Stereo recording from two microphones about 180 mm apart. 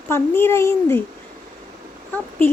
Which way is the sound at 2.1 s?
10° left (ahead or behind).